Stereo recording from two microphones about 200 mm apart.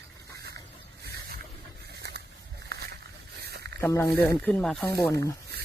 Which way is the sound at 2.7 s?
50° right (ahead or behind).